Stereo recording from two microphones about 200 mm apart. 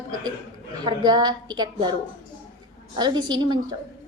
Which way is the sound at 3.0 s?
20° right (ahead or behind).